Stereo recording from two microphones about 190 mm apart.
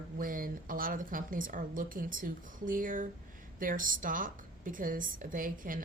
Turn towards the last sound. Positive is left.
turn(degrees=-45)  # may be behind; listen again after turning